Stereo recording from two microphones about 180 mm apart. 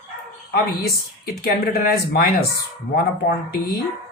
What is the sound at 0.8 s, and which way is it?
Speech, 60° left (ahead or behind).